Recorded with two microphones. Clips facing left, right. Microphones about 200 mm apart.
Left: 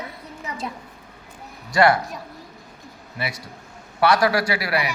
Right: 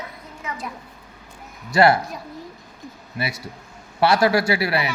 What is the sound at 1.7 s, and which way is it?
Speech, 25° right (ahead or behind).